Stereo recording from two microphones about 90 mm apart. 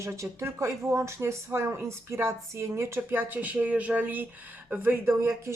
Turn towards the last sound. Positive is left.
turn(degrees=-30)  # may be behind; listen again after turning